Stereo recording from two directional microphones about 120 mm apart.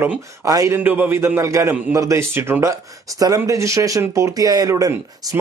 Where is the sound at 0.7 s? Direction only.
15° right (ahead or behind).